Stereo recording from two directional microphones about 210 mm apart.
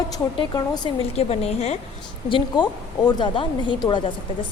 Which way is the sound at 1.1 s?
30° left (ahead or behind).